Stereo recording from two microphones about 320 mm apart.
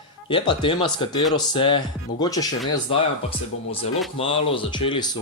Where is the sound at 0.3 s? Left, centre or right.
Centre.